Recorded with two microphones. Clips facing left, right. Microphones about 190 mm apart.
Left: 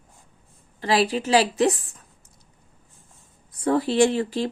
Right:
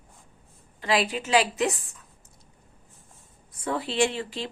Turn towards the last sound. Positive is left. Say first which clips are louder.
# left 6 dB
turn(degrees=40)  # may be behind; listen again after turning